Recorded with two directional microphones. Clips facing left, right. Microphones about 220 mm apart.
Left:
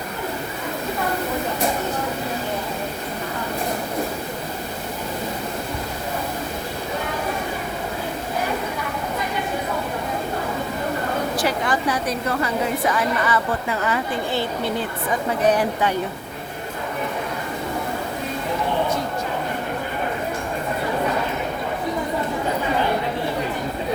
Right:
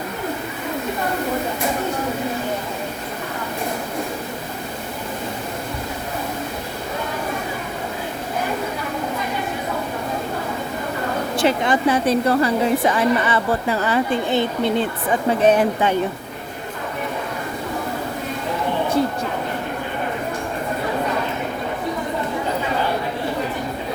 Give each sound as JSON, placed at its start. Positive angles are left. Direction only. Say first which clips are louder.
{"t": 11.3, "sound": "speech", "louder": "right 8 dB", "side_deg": -25}
{"t": 14.3, "sound": "speech", "louder": "right 4 dB", "side_deg": -20}